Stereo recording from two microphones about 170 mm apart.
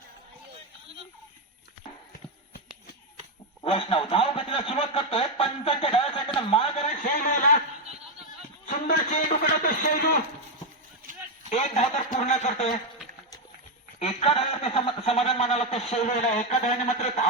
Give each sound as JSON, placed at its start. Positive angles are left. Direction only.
{"t": 3.6, "sound": "a man's voice", "side_deg": 30}
{"t": 7.0, "sound": "a man's voice", "side_deg": 55}
{"t": 8.6, "sound": "a man's voice", "side_deg": 50}
{"t": 11.4, "sound": "a man's voice", "side_deg": 45}
{"t": 14.0, "sound": "a man's voice", "side_deg": 35}